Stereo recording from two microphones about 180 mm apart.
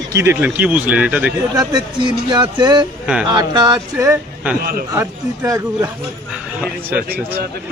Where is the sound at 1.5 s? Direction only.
25° right (ahead or behind).